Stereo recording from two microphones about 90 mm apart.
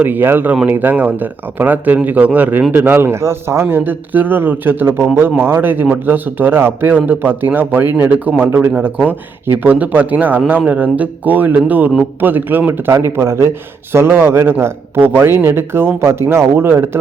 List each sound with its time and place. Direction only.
0.0 s speech: 20° right (ahead or behind)